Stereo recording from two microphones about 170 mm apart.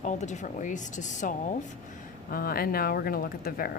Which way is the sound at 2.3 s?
60° left (ahead or behind).